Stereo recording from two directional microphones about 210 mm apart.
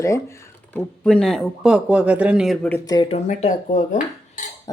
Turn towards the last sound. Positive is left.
turn(degrees=35)  # may be behind; listen again after turning